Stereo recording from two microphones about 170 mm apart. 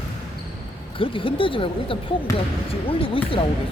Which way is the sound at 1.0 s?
30° left (ahead or behind).